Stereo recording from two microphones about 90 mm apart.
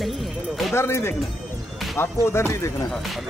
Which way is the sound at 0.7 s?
30° left (ahead or behind).